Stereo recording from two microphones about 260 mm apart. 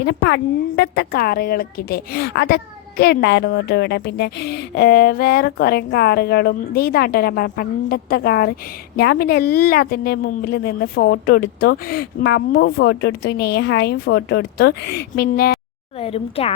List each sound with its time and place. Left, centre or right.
0.0 s speech: left
16.0 s a woman's voice: left